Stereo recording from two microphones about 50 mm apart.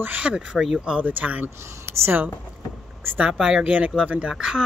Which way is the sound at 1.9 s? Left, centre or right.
Right.